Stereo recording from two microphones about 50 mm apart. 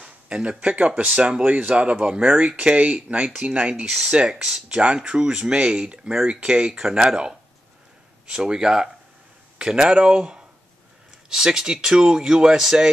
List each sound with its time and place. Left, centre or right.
0.0 s speech: right